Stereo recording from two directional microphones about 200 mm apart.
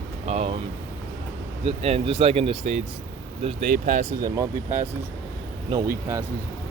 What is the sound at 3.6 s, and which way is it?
Speech, 40° right (ahead or behind).